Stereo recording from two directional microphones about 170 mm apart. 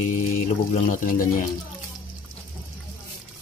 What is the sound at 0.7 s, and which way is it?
Speech, 50° left (ahead or behind).